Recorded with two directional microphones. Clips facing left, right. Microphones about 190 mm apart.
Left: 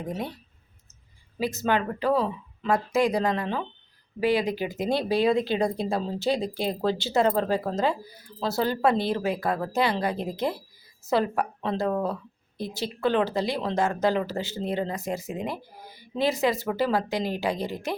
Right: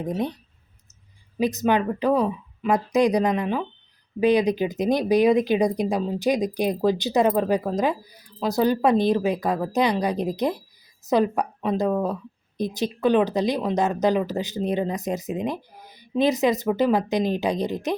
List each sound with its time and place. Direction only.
0.0 s speech: 20° right (ahead or behind)
1.4 s speech: 20° right (ahead or behind)